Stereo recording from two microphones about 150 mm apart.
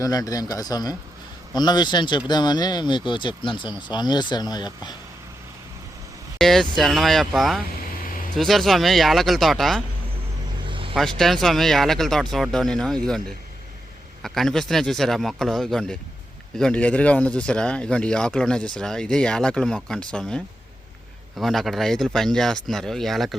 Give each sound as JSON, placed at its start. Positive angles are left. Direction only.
{"t": 0.0, "sound": "speech", "side_deg": 25}
{"t": 6.4, "sound": "speech", "side_deg": 0}
{"t": 10.7, "sound": "vehicle", "side_deg": -35}
{"t": 11.2, "sound": "speech", "side_deg": 0}